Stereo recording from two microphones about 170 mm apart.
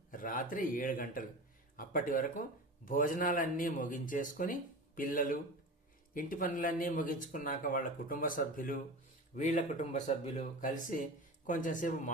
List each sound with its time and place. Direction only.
0.1 s speech: 55° left (ahead or behind)